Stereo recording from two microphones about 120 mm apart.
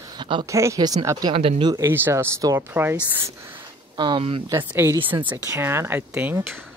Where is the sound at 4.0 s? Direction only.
45° right (ahead or behind).